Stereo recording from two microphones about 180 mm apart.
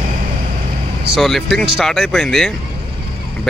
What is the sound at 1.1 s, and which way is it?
Speech, centre (ahead or behind).